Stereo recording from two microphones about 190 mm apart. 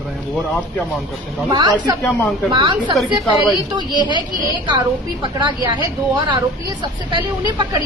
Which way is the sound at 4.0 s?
25° left (ahead or behind).